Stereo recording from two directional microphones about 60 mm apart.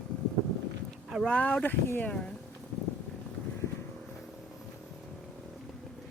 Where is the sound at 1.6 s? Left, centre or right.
Left.